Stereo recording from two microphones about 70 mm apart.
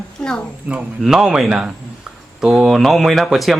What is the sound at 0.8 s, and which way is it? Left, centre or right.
Speech, centre.